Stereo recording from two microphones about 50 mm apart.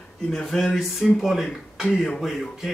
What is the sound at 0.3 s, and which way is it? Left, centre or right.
Speech, centre.